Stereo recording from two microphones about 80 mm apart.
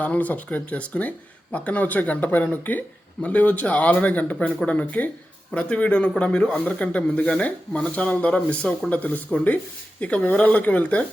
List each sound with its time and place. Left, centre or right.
0.0 s speech: centre